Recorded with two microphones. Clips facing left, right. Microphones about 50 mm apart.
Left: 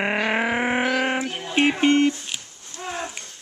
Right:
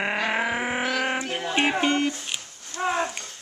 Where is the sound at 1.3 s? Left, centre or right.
Right.